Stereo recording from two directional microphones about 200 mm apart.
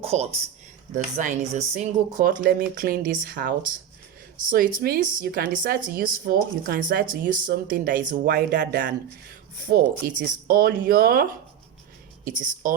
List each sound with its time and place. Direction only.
0.0 s speech: 30° right (ahead or behind); by 9.0 s 60° right (ahead or behind)
10.2 s speech: 45° right (ahead or behind)
12.6 s speech: 40° right (ahead or behind)